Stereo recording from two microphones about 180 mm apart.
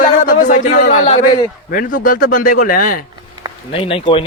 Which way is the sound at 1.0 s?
30° left (ahead or behind).